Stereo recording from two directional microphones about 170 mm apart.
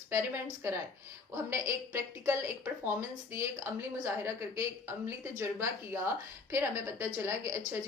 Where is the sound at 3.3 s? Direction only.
15° right (ahead or behind).